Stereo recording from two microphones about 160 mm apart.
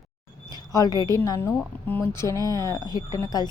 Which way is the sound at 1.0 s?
20° left (ahead or behind).